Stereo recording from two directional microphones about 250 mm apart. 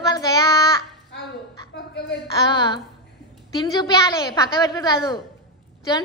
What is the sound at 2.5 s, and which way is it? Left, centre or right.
A woman's voice, centre.